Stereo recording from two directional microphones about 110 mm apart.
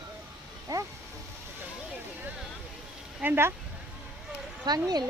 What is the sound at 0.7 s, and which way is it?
Speech, 30° right (ahead or behind).